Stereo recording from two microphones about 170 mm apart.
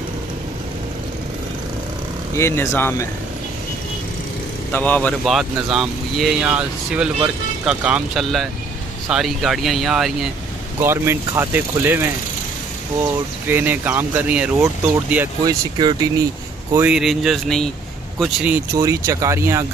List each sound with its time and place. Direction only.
2.3 s speech: 15° left (ahead or behind)
4.7 s speech: 10° left (ahead or behind)
10.8 s speech: 15° right (ahead or behind)
13.5 s speech: 10° right (ahead or behind)
15.4 s speech: 25° right (ahead or behind)
16.7 s speech: 5° right (ahead or behind)